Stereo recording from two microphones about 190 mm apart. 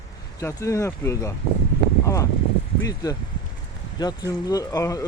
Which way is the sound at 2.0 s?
15° left (ahead or behind).